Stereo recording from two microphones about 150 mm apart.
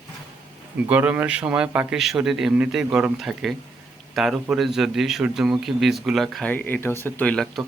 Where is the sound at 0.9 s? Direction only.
10° right (ahead or behind).